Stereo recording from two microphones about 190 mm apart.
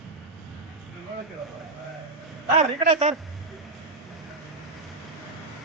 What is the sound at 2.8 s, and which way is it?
Speech, 35° right (ahead or behind).